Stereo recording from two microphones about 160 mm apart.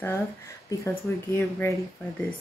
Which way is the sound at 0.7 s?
15° left (ahead or behind).